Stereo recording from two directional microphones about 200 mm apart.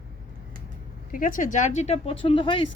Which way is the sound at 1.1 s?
45° left (ahead or behind).